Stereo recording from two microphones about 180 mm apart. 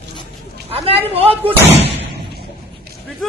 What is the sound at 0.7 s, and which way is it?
Speech, 35° right (ahead or behind).